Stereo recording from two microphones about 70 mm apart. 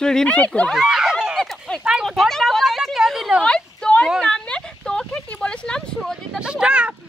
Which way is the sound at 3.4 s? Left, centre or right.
Centre.